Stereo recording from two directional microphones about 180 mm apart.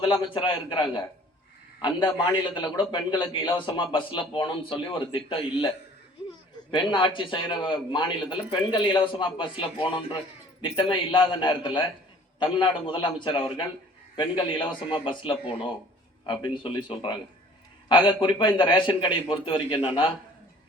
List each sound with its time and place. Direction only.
0.0 s a man's voice: 30° left (ahead or behind)